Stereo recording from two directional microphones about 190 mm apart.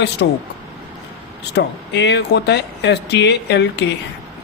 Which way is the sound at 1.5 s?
65° left (ahead or behind).